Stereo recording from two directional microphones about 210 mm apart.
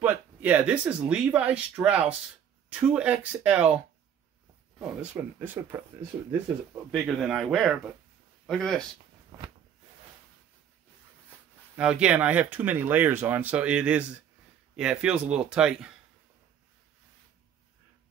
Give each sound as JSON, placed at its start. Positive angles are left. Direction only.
{"t": 0.0, "sound": "speech", "side_deg": -5}
{"t": 6.9, "sound": "speech", "side_deg": 0}
{"t": 9.3, "sound": "a sound", "side_deg": -20}
{"t": 11.7, "sound": "speech", "side_deg": -5}